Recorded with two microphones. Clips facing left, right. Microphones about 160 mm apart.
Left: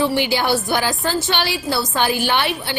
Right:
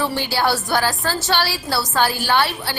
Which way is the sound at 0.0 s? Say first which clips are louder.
Left 2 dB; 15° left (ahead or behind).